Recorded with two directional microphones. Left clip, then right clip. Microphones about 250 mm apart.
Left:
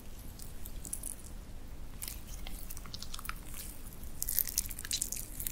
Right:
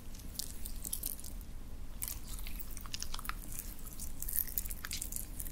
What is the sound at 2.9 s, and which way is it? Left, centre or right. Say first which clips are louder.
Biting: right 1 dB; centre.